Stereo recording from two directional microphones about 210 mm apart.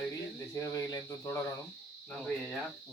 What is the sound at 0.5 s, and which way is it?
Speech, 15° left (ahead or behind).